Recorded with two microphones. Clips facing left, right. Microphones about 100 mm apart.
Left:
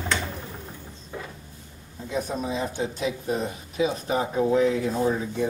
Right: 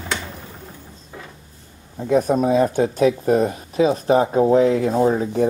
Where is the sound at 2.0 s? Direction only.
55° right (ahead or behind).